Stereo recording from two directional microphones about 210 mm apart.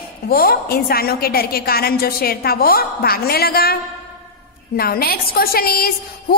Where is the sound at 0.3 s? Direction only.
45° left (ahead or behind).